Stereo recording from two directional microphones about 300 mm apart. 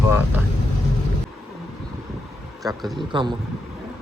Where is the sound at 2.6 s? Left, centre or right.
Centre.